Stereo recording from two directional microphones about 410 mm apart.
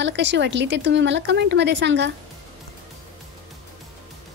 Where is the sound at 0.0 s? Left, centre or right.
Right.